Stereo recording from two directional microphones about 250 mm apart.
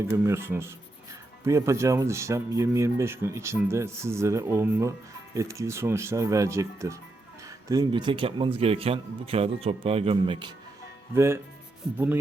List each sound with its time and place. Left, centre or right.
0.3 s speech: centre
11.1 s speech: centre